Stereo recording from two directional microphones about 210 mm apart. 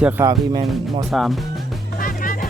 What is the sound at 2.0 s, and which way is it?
Music, 40° left (ahead or behind).